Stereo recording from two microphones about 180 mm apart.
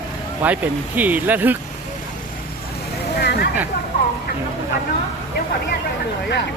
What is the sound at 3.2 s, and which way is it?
Vehicle, 65° left (ahead or behind).